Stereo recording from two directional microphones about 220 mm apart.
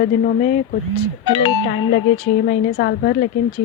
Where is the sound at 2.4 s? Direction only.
45° left (ahead or behind).